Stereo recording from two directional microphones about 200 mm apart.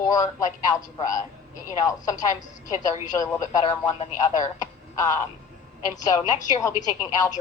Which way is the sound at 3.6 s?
25° left (ahead or behind).